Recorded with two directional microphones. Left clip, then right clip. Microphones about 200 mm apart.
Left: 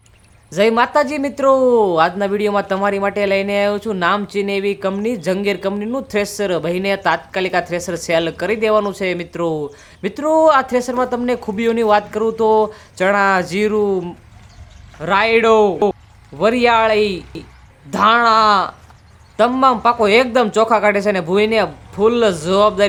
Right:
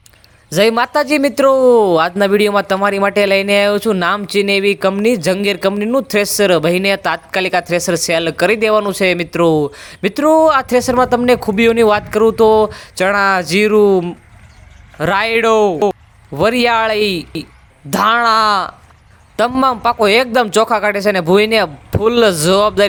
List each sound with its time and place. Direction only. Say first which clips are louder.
0.5 s speech: right 1 dB; 30° right (ahead or behind)
14.9 s speech: even; 35° right (ahead or behind)